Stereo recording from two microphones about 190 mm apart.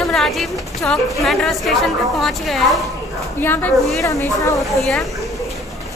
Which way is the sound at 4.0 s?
15° left (ahead or behind).